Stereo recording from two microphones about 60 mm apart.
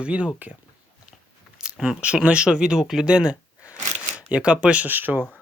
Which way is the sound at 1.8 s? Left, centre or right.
Centre.